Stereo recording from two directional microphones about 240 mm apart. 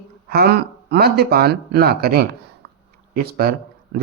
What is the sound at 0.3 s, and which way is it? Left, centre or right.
Speech, right.